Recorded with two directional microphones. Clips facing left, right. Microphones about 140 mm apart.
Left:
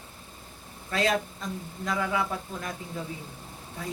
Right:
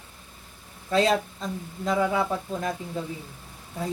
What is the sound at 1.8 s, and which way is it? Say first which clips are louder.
Speech: right 5 dB; 25° right (ahead or behind).